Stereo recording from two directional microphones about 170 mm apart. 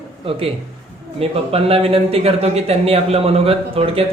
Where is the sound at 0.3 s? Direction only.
35° right (ahead or behind).